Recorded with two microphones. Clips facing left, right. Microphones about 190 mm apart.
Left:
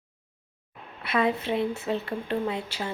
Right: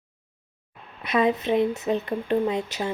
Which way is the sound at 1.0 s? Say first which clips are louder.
Right 3 dB; 20° right (ahead or behind).